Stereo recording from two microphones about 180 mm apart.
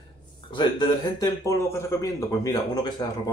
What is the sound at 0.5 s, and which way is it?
Speech, 25° left (ahead or behind).